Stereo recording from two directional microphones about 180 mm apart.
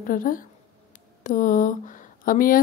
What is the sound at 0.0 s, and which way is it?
Speech, 50° left (ahead or behind).